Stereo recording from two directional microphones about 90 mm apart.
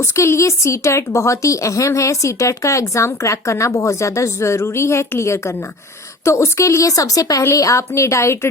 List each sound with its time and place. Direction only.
0.0 s a woman's voice: 30° left (ahead or behind)